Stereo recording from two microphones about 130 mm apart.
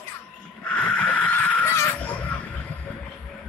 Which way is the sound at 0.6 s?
10° left (ahead or behind).